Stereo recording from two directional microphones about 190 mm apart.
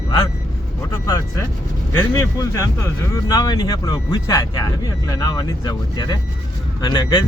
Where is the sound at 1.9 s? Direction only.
15° left (ahead or behind).